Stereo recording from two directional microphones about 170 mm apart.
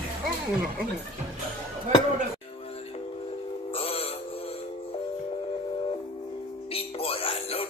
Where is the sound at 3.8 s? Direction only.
35° left (ahead or behind).